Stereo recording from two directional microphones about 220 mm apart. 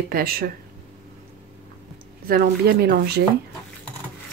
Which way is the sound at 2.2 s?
45° right (ahead or behind).